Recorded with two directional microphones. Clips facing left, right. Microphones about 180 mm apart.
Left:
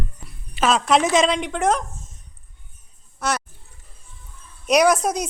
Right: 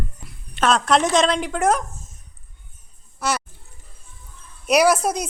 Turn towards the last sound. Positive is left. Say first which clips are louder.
# even
turn(degrees=0)  # may be behind; listen again after turning